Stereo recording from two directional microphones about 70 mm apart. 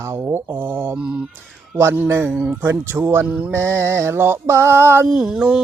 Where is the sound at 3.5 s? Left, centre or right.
Right.